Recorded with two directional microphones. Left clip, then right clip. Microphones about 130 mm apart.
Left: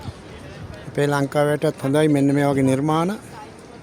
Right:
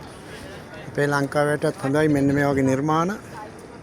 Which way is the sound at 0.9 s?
65° left (ahead or behind).